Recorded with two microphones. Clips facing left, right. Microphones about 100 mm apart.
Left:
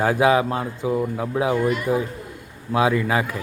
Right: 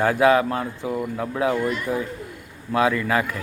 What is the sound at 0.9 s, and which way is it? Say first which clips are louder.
Speech: left 4 dB; centre (ahead or behind).